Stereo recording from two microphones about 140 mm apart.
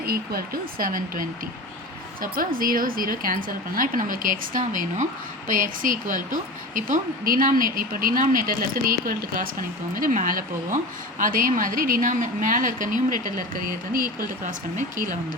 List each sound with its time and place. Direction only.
0.0 s a woman's voice: 90° right
14.4 s speech: 60° right (ahead or behind)